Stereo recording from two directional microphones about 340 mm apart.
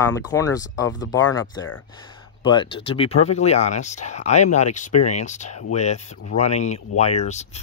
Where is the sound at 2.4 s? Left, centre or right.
Centre.